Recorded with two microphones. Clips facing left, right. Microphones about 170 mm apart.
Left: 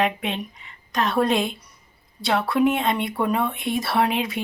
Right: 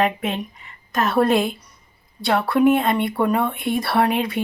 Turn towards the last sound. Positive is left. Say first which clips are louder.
# right 3 dB
turn(degrees=0)  # may be behind; listen again after turning